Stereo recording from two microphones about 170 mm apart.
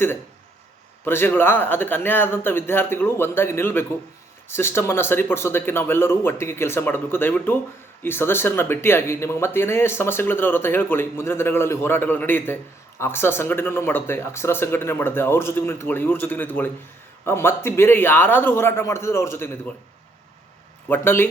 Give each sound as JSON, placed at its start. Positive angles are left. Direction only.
{"t": 1.0, "sound": "speech", "side_deg": 10}
{"t": 20.8, "sound": "speech", "side_deg": 10}